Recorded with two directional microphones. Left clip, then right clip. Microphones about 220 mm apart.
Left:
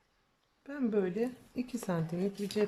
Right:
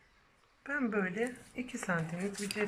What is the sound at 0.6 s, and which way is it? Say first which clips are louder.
Speech: left 1 dB; 20° left (ahead or behind).